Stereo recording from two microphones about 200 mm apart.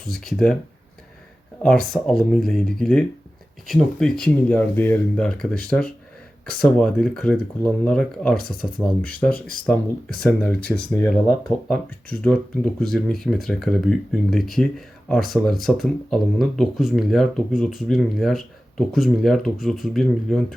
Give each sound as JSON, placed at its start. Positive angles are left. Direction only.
{"t": 0.1, "sound": "speech", "side_deg": 0}
{"t": 1.6, "sound": "speech", "side_deg": 0}
{"t": 6.6, "sound": "speech", "side_deg": 5}
{"t": 10.2, "sound": "speech", "side_deg": 5}